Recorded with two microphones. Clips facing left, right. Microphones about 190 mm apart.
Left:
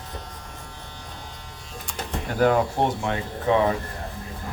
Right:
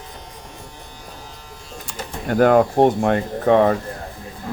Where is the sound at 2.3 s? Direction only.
55° right (ahead or behind).